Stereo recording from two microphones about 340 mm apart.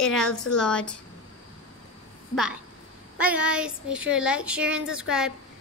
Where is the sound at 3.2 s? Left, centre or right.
Centre.